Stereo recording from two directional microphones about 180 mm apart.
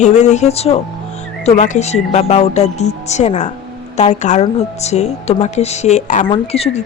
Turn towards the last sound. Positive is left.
turn(degrees=35)  # may be behind; listen again after turning